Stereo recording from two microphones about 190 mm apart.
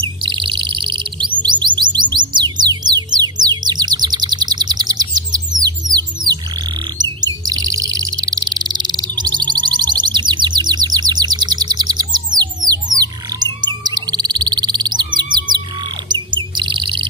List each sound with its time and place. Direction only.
0.0 s chirp: 25° right (ahead or behind)
1.4 s music: 25° right (ahead or behind)
7.0 s chirp: 20° right (ahead or behind)
16.1 s chirp: 25° right (ahead or behind)